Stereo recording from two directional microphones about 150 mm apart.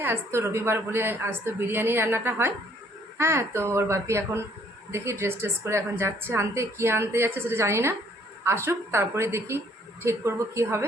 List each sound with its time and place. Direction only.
0.0 s a woman's voice: 15° right (ahead or behind)